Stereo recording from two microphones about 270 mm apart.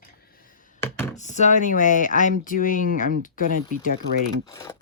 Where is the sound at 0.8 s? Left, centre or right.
Centre.